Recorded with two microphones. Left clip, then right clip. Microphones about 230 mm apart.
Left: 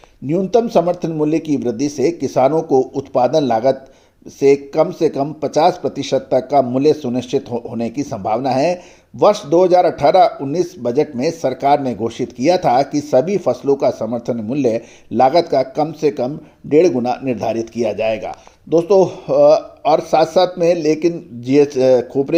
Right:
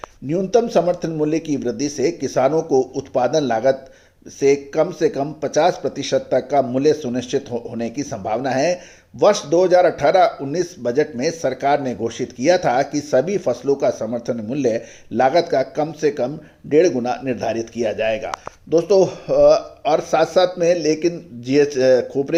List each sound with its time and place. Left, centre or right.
0.3 s speech: left